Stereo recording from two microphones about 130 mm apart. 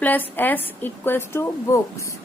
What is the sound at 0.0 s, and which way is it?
A woman's voice, 15° left (ahead or behind).